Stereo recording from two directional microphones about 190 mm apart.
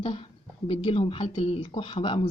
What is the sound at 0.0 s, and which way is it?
A woman's voice, 30° left (ahead or behind).